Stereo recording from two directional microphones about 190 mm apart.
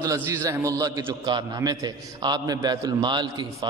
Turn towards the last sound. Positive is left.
turn(degrees=-25)  # may be behind; listen again after turning